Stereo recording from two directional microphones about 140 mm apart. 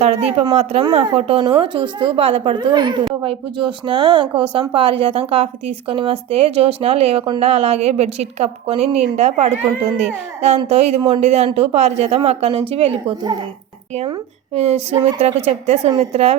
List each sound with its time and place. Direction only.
0.0 s a woman's voice: 45° right (ahead or behind)
14.5 s a woman's voice: 50° right (ahead or behind)